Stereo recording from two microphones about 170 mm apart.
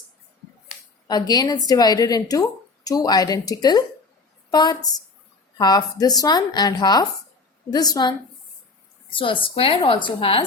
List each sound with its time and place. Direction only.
1.0 s a woman's voice: 25° left (ahead or behind)